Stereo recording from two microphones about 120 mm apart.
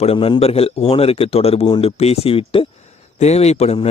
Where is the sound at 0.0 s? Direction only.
50° left (ahead or behind).